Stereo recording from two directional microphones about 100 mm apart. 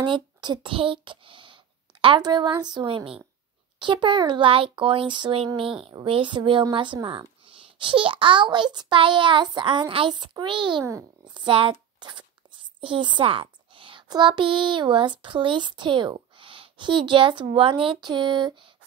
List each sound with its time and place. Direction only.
0.0 s speech: 50° right (ahead or behind)
8.7 s child singing: 50° right (ahead or behind)
10.8 s a child's voice: 30° right (ahead or behind)
11.2 s a sound: 55° right (ahead or behind)
13.0 s a child's voice: 60° right (ahead or behind)